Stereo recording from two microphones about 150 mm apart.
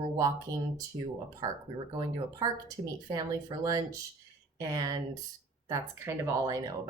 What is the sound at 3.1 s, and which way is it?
A woman's voice, 25° right (ahead or behind).